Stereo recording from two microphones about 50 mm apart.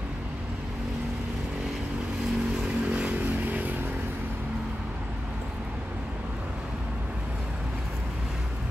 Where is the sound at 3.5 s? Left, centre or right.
Right.